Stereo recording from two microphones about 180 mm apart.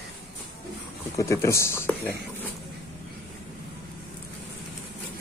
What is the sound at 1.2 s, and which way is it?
Speech, 15° left (ahead or behind).